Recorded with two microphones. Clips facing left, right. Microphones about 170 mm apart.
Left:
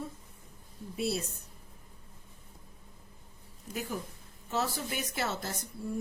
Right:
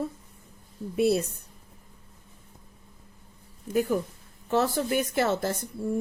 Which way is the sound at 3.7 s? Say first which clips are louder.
Right 12 dB; 55° right (ahead or behind).